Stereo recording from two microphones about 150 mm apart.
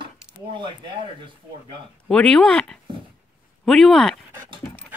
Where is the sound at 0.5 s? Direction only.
30° right (ahead or behind).